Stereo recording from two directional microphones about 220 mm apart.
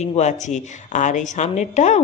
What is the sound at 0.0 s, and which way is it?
A woman's voice, 30° left (ahead or behind).